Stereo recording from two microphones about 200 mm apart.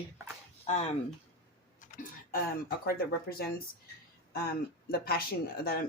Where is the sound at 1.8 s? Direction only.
45° left (ahead or behind).